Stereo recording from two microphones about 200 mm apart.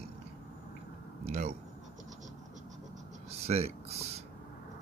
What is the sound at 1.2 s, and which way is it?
Speech, 35° right (ahead or behind).